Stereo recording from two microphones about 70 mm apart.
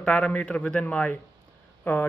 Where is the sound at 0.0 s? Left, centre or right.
Centre.